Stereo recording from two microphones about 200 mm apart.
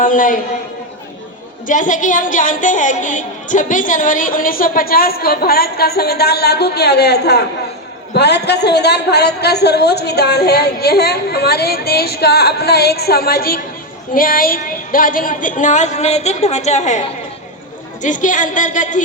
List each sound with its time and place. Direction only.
0.0 s a woman's voice: 40° left (ahead or behind)
1.6 s a woman's voice: 40° left (ahead or behind)
18.0 s a woman's voice: 40° left (ahead or behind)